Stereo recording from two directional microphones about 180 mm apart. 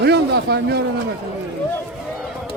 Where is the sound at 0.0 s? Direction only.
70° right (ahead or behind).